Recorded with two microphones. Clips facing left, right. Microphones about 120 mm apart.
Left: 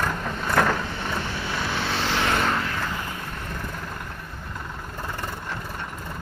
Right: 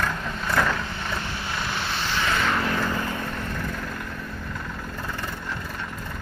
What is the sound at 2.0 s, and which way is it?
Vehicle, 90° left.